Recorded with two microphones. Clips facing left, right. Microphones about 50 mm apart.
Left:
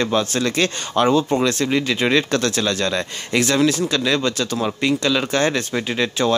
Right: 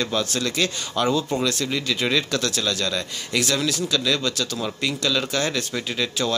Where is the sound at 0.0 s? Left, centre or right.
Left.